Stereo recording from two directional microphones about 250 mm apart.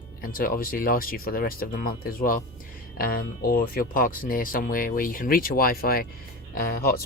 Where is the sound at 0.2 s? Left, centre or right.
Left.